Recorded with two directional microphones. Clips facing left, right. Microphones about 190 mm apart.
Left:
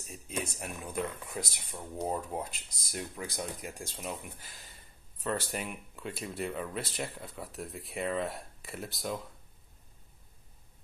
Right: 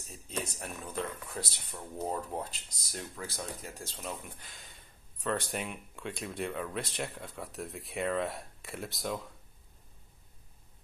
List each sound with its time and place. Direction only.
0.1 s speech: 10° left (ahead or behind)
4.2 s speech: centre (ahead or behind)